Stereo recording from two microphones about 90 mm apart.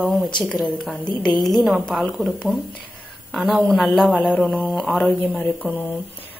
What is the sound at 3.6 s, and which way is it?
Speech, 5° left (ahead or behind).